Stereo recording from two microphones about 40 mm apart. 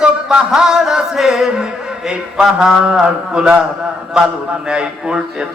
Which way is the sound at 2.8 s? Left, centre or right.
Right.